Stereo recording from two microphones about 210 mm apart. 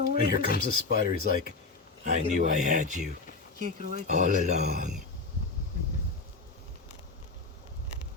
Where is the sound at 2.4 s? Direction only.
35° right (ahead or behind).